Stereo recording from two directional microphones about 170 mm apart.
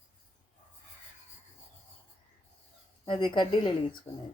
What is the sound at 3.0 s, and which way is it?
Speech, 30° left (ahead or behind).